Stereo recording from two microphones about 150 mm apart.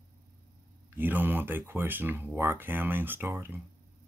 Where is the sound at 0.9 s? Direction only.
15° right (ahead or behind).